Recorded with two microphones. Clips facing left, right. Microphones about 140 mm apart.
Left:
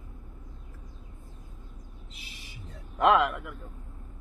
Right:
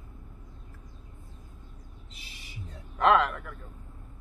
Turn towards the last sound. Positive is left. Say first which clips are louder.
# even
turn(degrees=10)  # may be behind; listen again after turning